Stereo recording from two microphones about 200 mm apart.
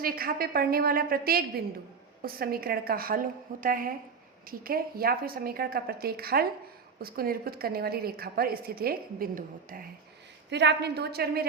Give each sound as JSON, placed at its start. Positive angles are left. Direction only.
{"t": 0.0, "sound": "a woman's voice", "side_deg": -45}
{"t": 10.5, "sound": "a woman's voice", "side_deg": -60}